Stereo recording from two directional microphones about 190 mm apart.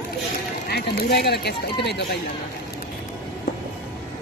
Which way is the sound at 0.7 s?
55° left (ahead or behind).